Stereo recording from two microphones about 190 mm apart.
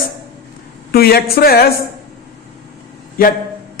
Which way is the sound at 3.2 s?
50° left (ahead or behind).